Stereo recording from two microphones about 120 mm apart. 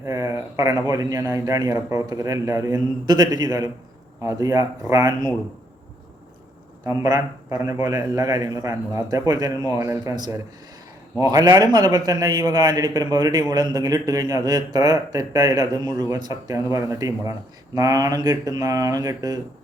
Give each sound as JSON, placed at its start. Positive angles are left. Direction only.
{"t": 0.0, "sound": "a man's voice", "side_deg": -25}
{"t": 6.8, "sound": "a man's voice", "side_deg": -25}